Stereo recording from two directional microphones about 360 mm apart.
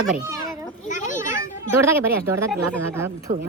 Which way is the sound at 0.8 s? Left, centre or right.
Left.